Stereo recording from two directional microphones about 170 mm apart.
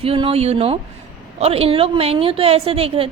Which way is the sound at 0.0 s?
35° right (ahead or behind).